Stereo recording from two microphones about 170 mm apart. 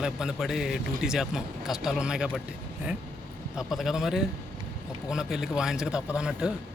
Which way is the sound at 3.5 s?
Centre (ahead or behind).